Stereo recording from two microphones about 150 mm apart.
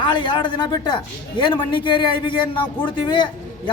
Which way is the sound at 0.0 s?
30° left (ahead or behind).